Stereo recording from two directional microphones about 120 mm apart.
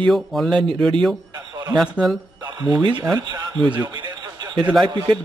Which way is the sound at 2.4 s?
35° right (ahead or behind).